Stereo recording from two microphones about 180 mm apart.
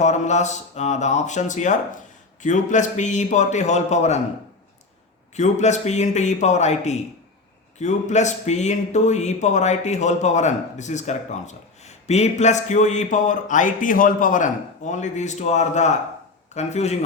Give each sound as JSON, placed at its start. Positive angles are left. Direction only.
{"t": 0.0, "sound": "speech", "side_deg": 40}
{"t": 5.4, "sound": "speech", "side_deg": 40}